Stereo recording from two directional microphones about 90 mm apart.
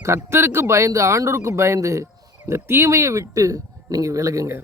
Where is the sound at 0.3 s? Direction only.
30° right (ahead or behind).